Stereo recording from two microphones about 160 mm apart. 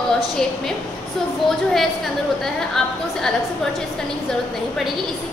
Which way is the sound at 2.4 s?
5° left (ahead or behind).